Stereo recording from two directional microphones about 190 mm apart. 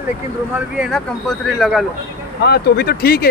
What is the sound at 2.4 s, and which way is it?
Speech, 60° left (ahead or behind).